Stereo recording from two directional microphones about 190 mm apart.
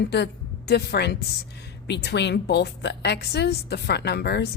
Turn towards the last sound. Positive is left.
turn(degrees=55)  # may be behind; listen again after turning